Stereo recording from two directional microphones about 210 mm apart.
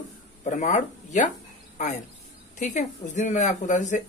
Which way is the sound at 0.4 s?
35° left (ahead or behind).